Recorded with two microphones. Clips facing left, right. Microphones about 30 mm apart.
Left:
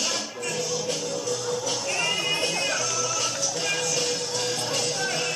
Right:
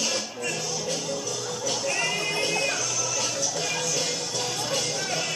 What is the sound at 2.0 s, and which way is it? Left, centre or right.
Music, centre.